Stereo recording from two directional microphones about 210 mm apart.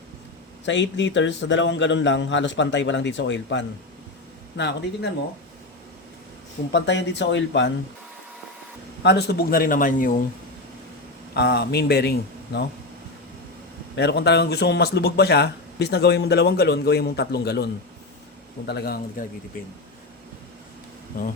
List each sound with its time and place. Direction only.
0.6 s a man's voice: 60° left (ahead or behind)
6.7 s a man's voice: 55° left (ahead or behind)
9.0 s a man's voice: 50° left (ahead or behind)
11.3 s speech: 50° left (ahead or behind)
13.9 s speech: 55° left (ahead or behind)